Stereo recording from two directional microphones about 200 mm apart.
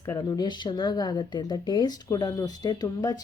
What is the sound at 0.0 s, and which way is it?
A woman's voice, 20° left (ahead or behind).